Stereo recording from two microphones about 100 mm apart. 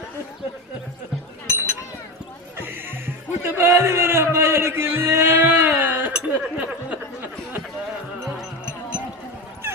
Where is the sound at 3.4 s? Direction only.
25° right (ahead or behind).